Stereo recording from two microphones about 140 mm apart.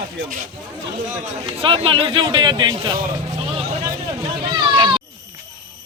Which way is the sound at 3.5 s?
35° right (ahead or behind).